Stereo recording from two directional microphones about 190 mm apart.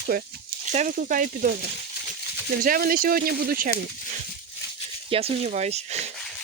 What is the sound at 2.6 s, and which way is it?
Speech, 50° right (ahead or behind).